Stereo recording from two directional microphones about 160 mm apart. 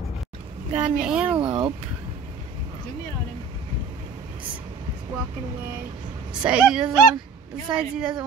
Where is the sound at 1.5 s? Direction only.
35° right (ahead or behind).